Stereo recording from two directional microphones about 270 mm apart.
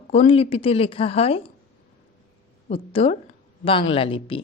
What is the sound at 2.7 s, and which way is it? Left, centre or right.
A man's voice, left.